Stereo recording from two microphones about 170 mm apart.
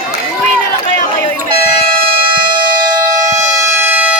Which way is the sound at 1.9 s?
60° right (ahead or behind).